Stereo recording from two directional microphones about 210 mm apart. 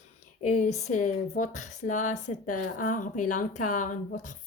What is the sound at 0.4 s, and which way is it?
A woman's voice, 35° left (ahead or behind).